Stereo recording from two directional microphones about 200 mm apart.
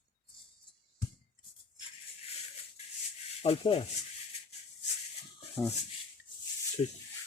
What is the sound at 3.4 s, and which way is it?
Speech, 30° left (ahead or behind).